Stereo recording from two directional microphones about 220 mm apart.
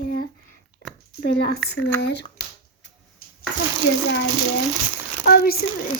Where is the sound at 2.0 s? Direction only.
50° left (ahead or behind).